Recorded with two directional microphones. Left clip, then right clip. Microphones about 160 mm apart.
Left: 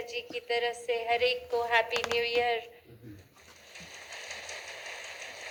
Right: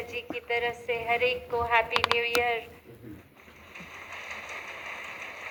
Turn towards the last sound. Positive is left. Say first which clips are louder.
# right 3 dB
turn(degrees=30)  # may be behind; listen again after turning